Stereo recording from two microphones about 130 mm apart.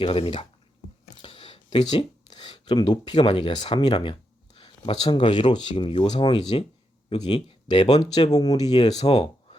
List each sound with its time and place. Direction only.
0.0 s speech: 45° left (ahead or behind)
9.0 s speech: 50° left (ahead or behind)